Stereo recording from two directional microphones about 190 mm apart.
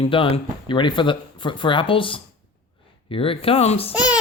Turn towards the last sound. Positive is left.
turn(degrees=30)  # may be behind; listen again after turning